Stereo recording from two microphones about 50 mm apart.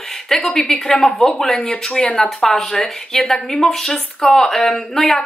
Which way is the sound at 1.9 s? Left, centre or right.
Centre.